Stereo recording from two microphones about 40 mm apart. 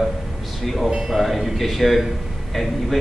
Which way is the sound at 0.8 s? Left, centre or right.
Centre.